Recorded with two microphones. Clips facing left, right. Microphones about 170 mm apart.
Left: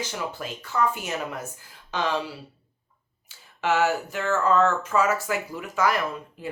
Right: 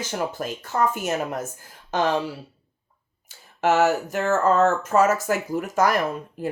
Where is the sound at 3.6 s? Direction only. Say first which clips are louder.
Right 4 dB; 45° right (ahead or behind).